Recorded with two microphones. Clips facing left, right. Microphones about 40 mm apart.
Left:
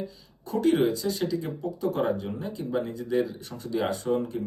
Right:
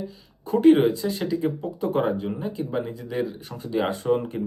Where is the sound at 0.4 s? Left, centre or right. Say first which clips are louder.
Right 6 dB; right.